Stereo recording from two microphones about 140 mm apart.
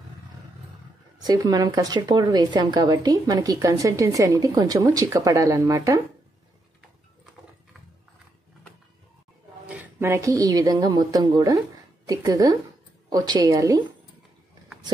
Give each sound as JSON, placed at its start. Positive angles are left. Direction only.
{"t": 1.2, "sound": "a woman's voice", "side_deg": -30}
{"t": 9.7, "sound": "a woman's voice", "side_deg": -15}